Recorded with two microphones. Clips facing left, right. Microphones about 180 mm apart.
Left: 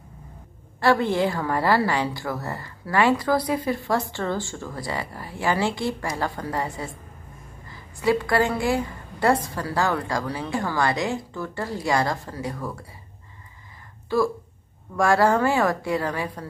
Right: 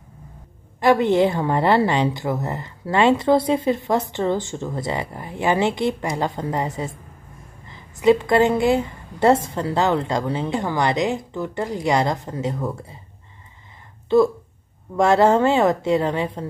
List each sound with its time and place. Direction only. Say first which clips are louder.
0.7 s a woman's voice: right 4 dB; 20° right (ahead or behind)
14.0 s a woman's voice: right 6 dB; 20° right (ahead or behind)